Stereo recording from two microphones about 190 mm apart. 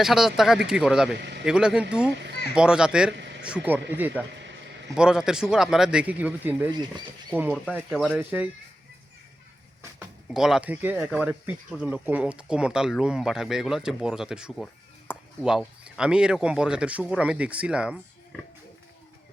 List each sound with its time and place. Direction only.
0.0 s speech: centre (ahead or behind)
1.2 s a man's voice: 65° right (ahead or behind)
1.5 s speech: 5° right (ahead or behind)
7.7 s speech: 5° right (ahead or behind)
10.2 s speech: 5° right (ahead or behind)